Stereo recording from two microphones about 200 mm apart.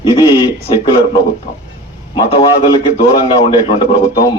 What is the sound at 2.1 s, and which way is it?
A man's voice, 25° left (ahead or behind).